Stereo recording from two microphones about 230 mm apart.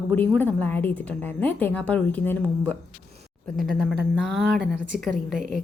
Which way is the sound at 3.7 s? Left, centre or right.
Right.